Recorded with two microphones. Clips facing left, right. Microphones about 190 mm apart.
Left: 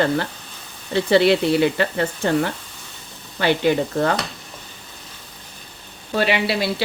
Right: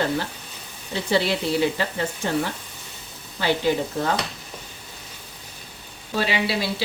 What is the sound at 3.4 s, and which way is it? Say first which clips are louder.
Speech: left 4 dB; 65° left (ahead or behind).